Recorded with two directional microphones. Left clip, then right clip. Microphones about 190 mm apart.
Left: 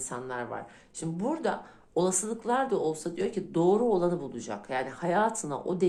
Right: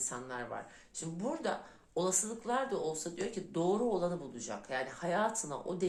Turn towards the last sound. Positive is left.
turn(degrees=40)  # may be behind; listen again after turning